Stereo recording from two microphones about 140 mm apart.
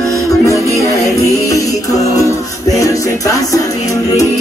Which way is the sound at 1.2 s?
25° left (ahead or behind).